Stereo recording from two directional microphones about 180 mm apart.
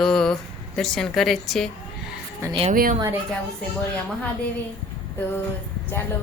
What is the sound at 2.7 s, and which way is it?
Speech, 50° right (ahead or behind).